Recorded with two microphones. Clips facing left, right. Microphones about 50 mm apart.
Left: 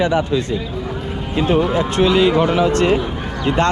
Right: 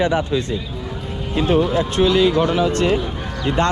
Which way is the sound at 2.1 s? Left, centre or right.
Left.